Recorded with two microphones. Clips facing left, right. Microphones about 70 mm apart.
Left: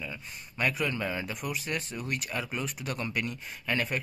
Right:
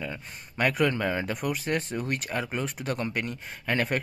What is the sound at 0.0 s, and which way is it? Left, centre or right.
Speech, right.